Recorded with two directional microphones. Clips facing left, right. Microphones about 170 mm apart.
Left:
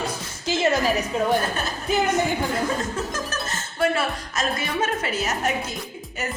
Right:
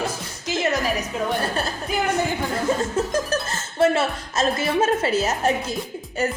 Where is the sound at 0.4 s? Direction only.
30° left (ahead or behind).